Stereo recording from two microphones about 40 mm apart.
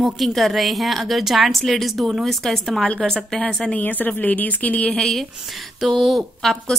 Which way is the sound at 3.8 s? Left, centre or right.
Left.